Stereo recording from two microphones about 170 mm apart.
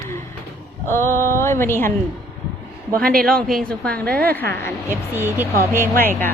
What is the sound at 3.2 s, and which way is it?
A woman's voice, 5° left (ahead or behind).